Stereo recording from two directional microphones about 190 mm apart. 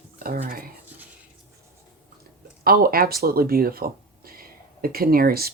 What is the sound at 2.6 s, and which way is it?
Speech, 50° right (ahead or behind).